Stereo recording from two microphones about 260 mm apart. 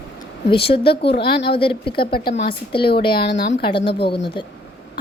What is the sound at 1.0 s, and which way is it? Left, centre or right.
Speech, left.